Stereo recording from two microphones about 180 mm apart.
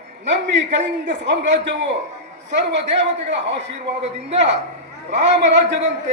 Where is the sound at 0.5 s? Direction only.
85° right.